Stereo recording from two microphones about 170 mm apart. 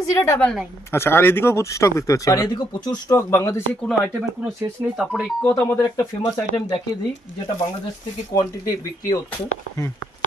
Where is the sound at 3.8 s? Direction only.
Centre (ahead or behind).